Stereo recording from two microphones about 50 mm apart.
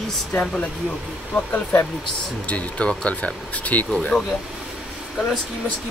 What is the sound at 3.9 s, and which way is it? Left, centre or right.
Speech, centre.